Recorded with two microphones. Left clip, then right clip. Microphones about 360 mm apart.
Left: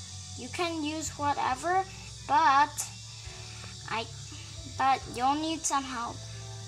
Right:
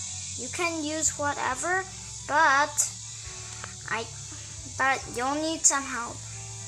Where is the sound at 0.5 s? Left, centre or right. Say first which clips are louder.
Right 2 dB; centre.